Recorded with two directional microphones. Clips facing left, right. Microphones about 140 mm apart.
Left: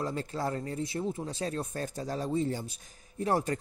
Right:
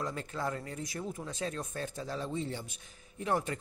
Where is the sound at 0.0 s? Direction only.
35° left (ahead or behind).